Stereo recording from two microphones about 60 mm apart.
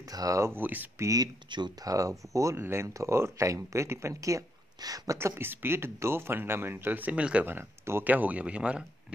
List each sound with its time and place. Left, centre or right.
0.1 s speech: right
0.4 s speech: right
0.9 s speech: right
2.6 s speech: right
2.9 s speech: right
5.1 s speech: right
7.4 s speech: right
8.0 s speech: right